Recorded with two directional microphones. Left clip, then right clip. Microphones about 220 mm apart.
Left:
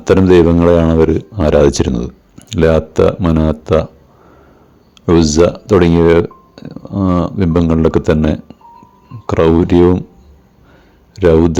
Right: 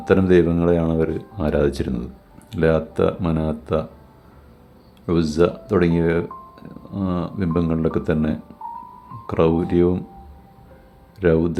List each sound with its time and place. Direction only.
0.0 s speech: 35° left (ahead or behind)
5.0 s speech: 30° left (ahead or behind)
11.2 s speech: 30° left (ahead or behind)